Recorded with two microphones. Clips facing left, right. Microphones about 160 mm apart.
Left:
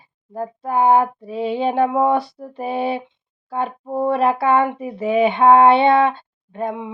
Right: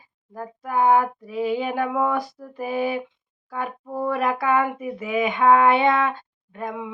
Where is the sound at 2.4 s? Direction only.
30° left (ahead or behind).